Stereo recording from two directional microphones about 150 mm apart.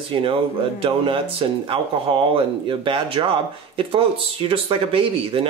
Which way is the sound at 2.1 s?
35° right (ahead or behind).